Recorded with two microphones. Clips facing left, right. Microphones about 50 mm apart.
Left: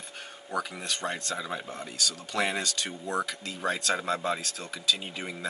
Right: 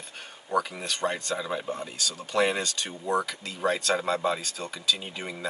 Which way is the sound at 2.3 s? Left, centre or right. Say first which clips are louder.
Right 4 dB; centre.